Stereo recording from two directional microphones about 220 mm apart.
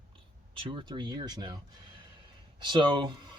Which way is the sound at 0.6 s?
20° right (ahead or behind).